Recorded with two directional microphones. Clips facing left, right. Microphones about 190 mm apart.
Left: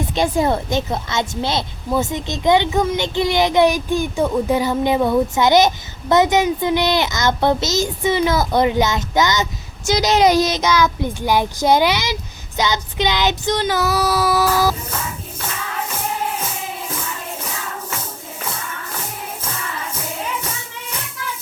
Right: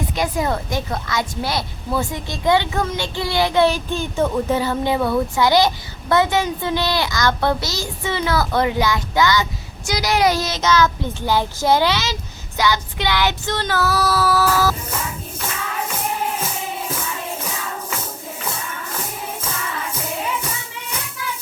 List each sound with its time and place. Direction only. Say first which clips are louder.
0.1 s a woman's voice: left 5 dB; 25° left (ahead or behind)
12.5 s child singing: even; 20° left (ahead or behind)